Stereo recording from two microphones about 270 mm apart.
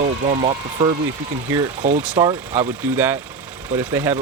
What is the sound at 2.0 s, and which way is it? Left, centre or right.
Speech, centre.